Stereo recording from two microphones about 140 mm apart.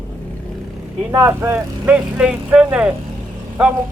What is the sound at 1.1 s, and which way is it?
Speech, 20° right (ahead or behind).